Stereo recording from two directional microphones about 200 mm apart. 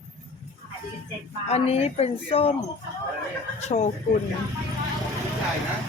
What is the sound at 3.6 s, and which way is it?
Speech, 35° left (ahead or behind).